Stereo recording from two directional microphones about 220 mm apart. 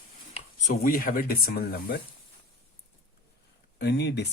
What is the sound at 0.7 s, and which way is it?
Speech, 40° left (ahead or behind).